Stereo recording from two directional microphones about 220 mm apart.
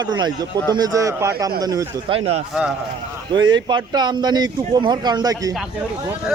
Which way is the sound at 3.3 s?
20° right (ahead or behind).